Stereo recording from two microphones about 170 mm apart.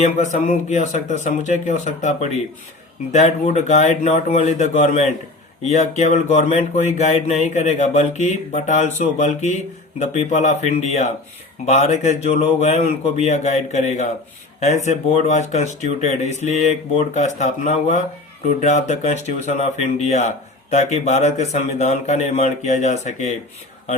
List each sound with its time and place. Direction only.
0.0 s speech: 45° left (ahead or behind)
15.3 s speech: 45° left (ahead or behind)